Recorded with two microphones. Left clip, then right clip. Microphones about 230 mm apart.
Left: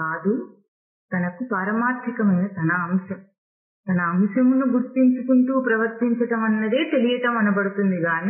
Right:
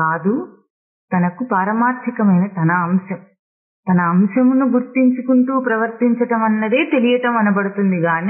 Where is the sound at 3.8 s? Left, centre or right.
Right.